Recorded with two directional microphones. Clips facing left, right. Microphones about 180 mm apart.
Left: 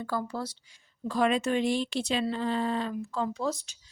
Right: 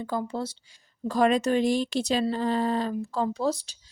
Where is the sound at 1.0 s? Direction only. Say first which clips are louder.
Right 4 dB; 40° right (ahead or behind).